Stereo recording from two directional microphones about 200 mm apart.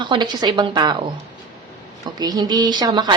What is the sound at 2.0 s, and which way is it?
Speech, 20° right (ahead or behind).